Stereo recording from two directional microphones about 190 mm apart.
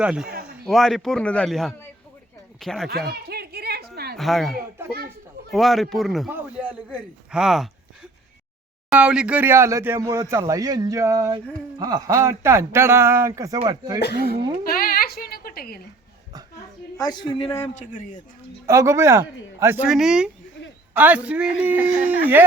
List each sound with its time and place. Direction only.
0.0 s a man's voice: 5° right (ahead or behind)
3.1 s a sound: 55° right (ahead or behind)
4.2 s a man's voice: centre (ahead or behind)
8.9 s speech: 5° right (ahead or behind); by 14.0 s 20° right (ahead or behind)
14.0 s speech: 55° left (ahead or behind)
14.6 s a sound: 50° left (ahead or behind)
17.0 s speech: 20° left (ahead or behind)
17.7 s a man's voice: 40° left (ahead or behind)
18.6 s speech: 15° right (ahead or behind)